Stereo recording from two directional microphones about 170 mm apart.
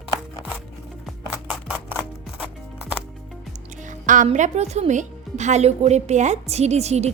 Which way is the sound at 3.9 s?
50° right (ahead or behind).